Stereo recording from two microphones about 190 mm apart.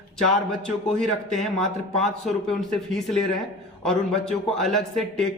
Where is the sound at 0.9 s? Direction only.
Centre (ahead or behind).